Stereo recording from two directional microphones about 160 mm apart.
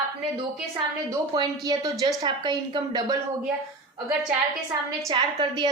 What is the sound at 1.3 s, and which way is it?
A woman's voice, 25° right (ahead or behind).